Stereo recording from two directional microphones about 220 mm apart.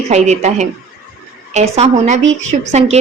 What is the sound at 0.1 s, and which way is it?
A woman's voice, 30° right (ahead or behind).